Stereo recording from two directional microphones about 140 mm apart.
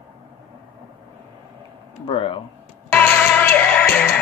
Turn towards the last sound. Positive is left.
turn(degrees=15)  # may be behind; listen again after turning